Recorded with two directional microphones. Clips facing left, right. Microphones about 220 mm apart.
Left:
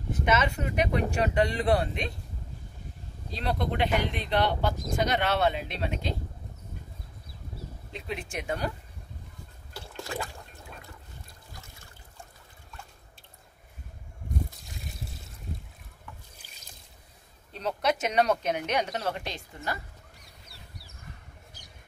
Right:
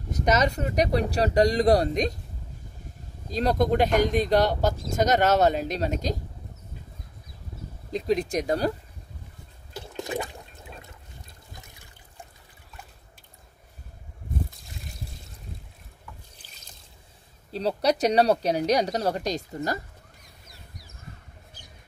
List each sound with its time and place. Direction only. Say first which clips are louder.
0.1 s speech: right 3 dB; 40° right (ahead or behind)
3.3 s speech: right 8 dB; 40° right (ahead or behind)
7.9 s speech: right 12 dB; 40° right (ahead or behind)
9.8 s toilet flush: right 5 dB; 20° right (ahead or behind)
14.7 s trickle: even; centre (ahead or behind)
16.4 s trickle: right 1 dB; 10° left (ahead or behind)
17.5 s speech: right 4 dB; 35° right (ahead or behind)